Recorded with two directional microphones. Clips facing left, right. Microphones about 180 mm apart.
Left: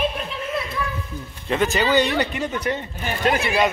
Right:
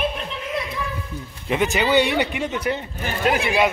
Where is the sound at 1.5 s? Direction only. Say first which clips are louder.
Even; 15° right (ahead or behind).